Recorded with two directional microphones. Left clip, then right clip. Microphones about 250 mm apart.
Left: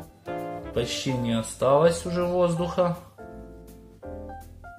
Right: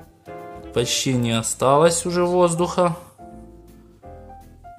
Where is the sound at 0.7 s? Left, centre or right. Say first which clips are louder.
Right 7 dB; right.